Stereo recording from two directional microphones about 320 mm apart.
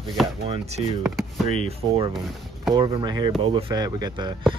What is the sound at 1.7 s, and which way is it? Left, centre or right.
Speech, centre.